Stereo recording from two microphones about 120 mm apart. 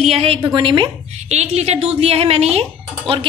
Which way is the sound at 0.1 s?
55° right (ahead or behind).